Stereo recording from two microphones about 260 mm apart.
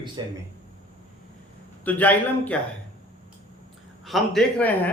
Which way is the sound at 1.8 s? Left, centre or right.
Centre.